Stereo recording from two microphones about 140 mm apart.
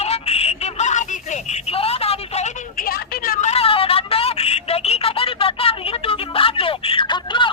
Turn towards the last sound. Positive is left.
turn(degrees=35)  # may be behind; listen again after turning